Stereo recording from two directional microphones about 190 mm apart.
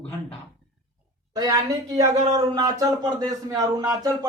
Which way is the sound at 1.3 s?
20° right (ahead or behind).